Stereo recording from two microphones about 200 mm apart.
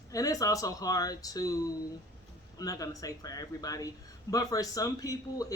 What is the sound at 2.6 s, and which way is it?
Speech, 15° left (ahead or behind).